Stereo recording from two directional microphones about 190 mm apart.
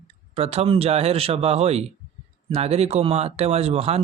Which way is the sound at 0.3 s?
30° right (ahead or behind).